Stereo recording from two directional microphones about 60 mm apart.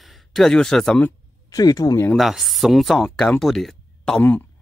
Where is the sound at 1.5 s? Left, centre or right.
Left.